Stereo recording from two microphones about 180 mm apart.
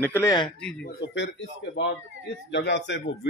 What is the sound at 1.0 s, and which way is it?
Speech, 80° left.